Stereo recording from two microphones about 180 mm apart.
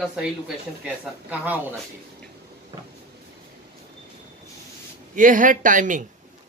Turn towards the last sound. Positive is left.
turn(degrees=-45)  # may be behind; listen again after turning